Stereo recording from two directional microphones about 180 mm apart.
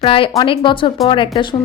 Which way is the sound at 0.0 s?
30° left (ahead or behind).